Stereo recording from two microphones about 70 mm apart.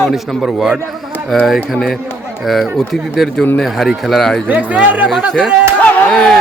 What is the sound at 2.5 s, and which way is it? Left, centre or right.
Speech, centre.